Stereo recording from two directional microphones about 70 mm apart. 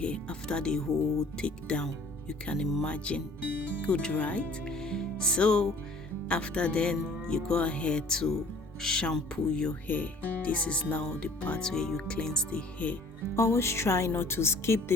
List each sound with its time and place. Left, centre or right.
0.0 s speech: centre
4.7 s music: centre
6.2 s speech: centre
9.8 s speech: left
13.3 s a woman's voice: left